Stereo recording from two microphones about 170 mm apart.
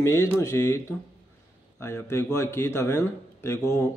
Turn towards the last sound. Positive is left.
turn(degrees=15)  # may be behind; listen again after turning